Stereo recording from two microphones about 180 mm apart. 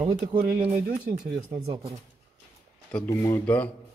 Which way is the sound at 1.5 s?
20° right (ahead or behind).